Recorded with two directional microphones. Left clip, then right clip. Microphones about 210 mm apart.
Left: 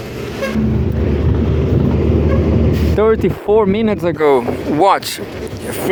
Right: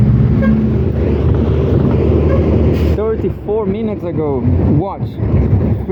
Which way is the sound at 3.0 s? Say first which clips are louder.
Left 4 dB; 85° left.